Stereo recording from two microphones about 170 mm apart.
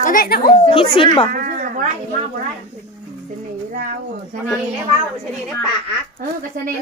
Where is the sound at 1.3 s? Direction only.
55° right (ahead or behind).